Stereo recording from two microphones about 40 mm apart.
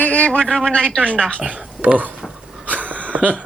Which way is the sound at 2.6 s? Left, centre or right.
Right.